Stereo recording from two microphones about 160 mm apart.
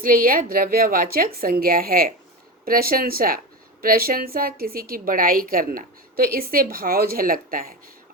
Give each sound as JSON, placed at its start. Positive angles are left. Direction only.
{"t": 0.0, "sound": "a woman's voice", "side_deg": -60}